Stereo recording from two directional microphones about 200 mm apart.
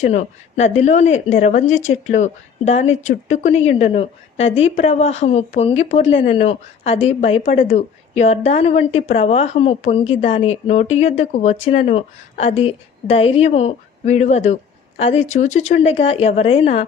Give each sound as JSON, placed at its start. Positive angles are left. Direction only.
{"t": 0.0, "sound": "a woman's voice", "side_deg": 35}
{"t": 4.4, "sound": "a woman's voice", "side_deg": 70}
{"t": 4.6, "sound": "a woman's voice", "side_deg": 35}